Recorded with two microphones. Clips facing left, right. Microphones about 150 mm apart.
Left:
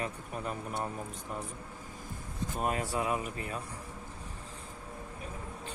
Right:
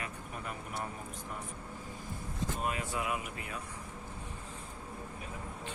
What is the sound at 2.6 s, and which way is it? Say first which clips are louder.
Speech: left 6 dB; 40° left (ahead or behind).